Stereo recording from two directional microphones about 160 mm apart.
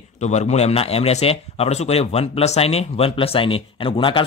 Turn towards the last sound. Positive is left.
turn(degrees=35)  # may be behind; listen again after turning